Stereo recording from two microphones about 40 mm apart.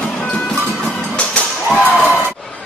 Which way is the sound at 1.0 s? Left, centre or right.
Left.